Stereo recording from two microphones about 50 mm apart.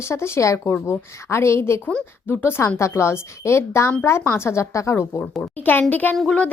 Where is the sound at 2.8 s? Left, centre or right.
Left.